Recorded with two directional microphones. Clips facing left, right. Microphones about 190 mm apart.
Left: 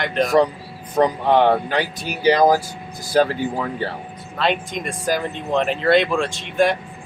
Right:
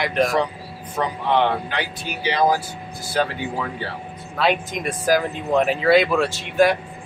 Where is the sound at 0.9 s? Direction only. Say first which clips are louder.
Left 5 dB; 40° left (ahead or behind).